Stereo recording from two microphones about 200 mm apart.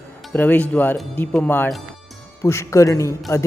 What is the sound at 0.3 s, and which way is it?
A woman's voice, 10° left (ahead or behind).